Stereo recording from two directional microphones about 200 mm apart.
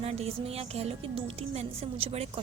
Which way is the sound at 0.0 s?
30° right (ahead or behind).